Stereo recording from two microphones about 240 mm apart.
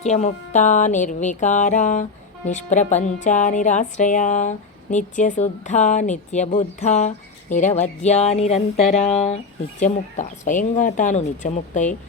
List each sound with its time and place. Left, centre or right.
0.0 s speech: left